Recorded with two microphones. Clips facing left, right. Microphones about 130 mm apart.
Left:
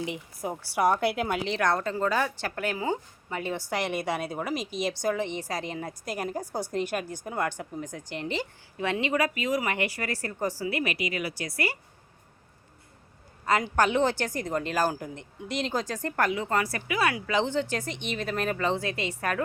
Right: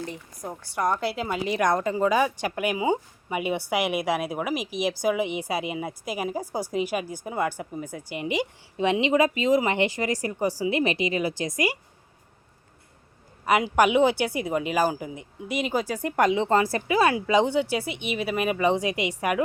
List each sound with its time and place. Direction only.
0.1 s a woman's voice: 10° left (ahead or behind)
1.5 s speech: 15° right (ahead or behind)
13.4 s a woman's voice: 15° right (ahead or behind)